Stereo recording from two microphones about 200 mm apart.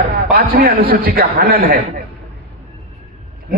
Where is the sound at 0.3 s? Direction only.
50° right (ahead or behind).